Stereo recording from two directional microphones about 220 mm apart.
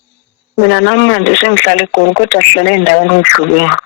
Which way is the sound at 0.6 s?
60° left (ahead or behind).